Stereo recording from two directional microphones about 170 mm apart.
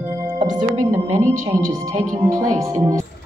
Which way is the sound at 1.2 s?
50° right (ahead or behind).